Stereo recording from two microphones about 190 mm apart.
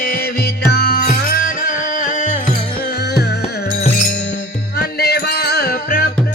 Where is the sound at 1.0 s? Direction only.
40° left (ahead or behind).